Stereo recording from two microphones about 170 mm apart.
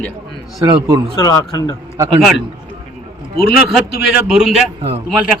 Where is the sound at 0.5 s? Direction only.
20° right (ahead or behind).